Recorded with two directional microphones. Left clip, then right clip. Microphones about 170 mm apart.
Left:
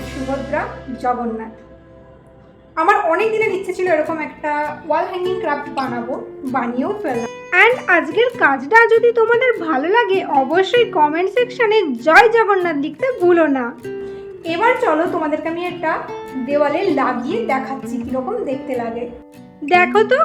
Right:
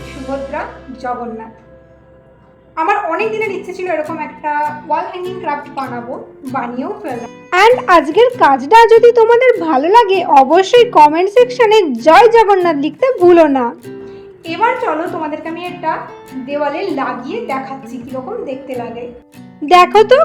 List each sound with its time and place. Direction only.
0.5 s speech: centre (ahead or behind)
2.7 s speech: centre (ahead or behind)
7.5 s a woman's voice: 35° right (ahead or behind)
14.4 s speech: centre (ahead or behind)
19.6 s a woman's voice: 40° right (ahead or behind)